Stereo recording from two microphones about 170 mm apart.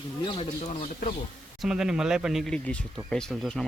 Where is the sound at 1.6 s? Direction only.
5° right (ahead or behind).